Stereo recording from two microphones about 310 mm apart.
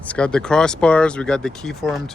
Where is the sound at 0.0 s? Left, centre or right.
Centre.